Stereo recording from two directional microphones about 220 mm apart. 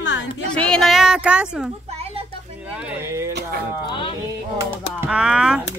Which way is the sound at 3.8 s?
20° left (ahead or behind).